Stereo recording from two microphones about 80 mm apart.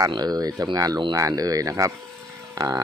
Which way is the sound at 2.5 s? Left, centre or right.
Right.